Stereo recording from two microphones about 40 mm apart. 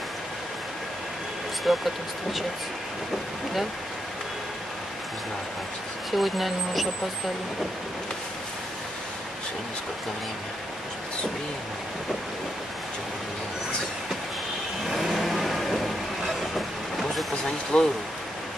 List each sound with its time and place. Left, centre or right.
1.7 s speech: centre
6.1 s speech: centre
15.0 s vehicle: centre
17.7 s speech: left